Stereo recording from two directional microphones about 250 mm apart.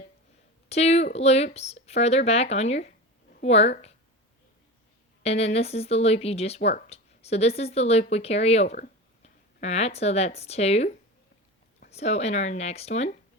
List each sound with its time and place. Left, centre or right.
0.7 s speech: left
5.2 s speech: left